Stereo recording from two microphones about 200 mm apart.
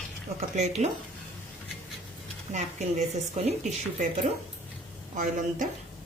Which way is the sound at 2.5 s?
35° right (ahead or behind).